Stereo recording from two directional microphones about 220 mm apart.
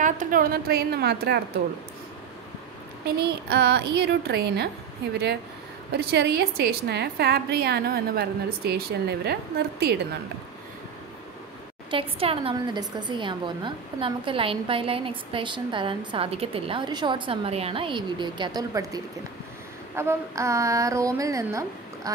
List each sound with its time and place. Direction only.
0.0 s a woman's voice: 35° right (ahead or behind)
3.2 s a woman's voice: 45° right (ahead or behind)
5.9 s a woman's voice: 45° right (ahead or behind)
11.9 s a woman's voice: 25° right (ahead or behind)
20.0 s a woman's voice: 10° right (ahead or behind)